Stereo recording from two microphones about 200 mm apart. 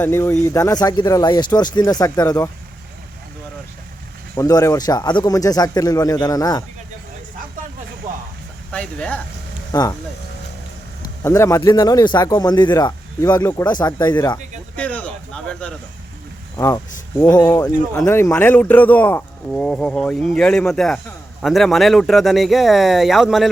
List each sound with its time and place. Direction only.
0.0 s speech: 10° left (ahead or behind)
4.4 s a man's voice: 15° left (ahead or behind)
8.7 s speech: 5° left (ahead or behind)
9.7 s a man's voice: 20° left (ahead or behind)
11.2 s a man's voice: 15° left (ahead or behind)
14.8 s a sound: 5° left (ahead or behind)
16.6 s speech: 15° left (ahead or behind); by 23.5 s centre (ahead or behind)